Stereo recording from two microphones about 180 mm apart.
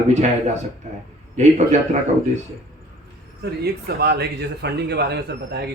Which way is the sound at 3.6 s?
60° right (ahead or behind).